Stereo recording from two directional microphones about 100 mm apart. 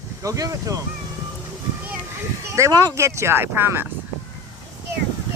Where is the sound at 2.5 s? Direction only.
35° right (ahead or behind).